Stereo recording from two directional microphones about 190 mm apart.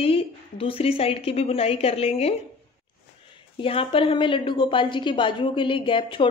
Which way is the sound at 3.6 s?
30° left (ahead or behind).